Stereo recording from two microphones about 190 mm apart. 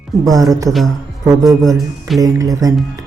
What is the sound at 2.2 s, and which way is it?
Speech, 20° right (ahead or behind).